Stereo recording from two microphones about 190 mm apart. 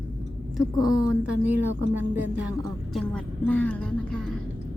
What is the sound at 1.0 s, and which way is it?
Speech, 5° right (ahead or behind).